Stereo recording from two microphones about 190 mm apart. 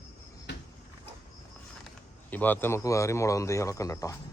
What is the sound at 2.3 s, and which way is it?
Speech, 10° left (ahead or behind).